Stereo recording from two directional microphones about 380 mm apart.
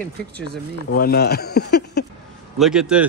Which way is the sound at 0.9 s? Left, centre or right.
Left.